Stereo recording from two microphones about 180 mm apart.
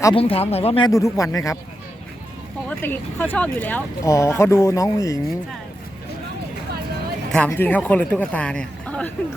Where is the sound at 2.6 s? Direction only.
10° left (ahead or behind).